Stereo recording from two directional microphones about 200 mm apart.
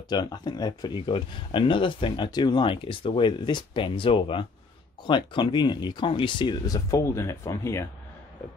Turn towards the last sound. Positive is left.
turn(degrees=15)  # may be behind; listen again after turning